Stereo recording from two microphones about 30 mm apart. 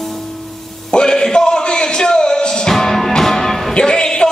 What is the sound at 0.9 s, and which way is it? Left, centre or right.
Music, left.